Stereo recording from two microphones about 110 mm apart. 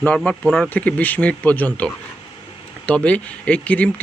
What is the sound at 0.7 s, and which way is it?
Speech, 15° left (ahead or behind).